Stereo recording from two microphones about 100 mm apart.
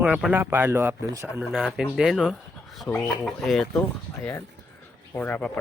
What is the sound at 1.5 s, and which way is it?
Speech, centre (ahead or behind).